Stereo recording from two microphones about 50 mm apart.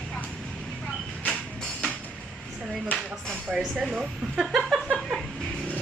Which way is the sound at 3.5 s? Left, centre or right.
Centre.